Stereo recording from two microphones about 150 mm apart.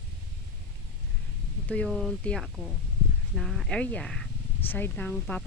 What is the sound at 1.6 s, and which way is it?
Speech, 5° left (ahead or behind).